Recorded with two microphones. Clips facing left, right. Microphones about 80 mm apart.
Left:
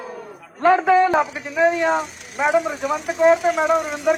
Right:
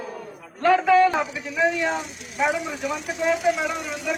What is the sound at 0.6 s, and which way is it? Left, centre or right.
Speech, left.